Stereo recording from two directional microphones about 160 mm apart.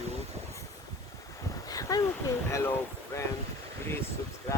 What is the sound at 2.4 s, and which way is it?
A woman's voice, 15° left (ahead or behind).